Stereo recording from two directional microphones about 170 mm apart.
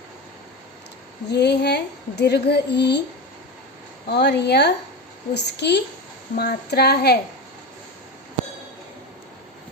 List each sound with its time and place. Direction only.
1.3 s speech: 80° left
4.1 s a woman's voice: 80° left
6.3 s speech: 65° left (ahead or behind)